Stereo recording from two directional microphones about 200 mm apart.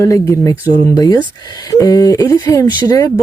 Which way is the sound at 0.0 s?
15° left (ahead or behind).